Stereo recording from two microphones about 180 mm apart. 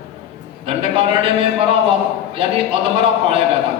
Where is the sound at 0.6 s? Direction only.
30° right (ahead or behind).